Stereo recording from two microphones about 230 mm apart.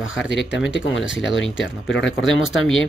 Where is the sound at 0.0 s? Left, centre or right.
Left.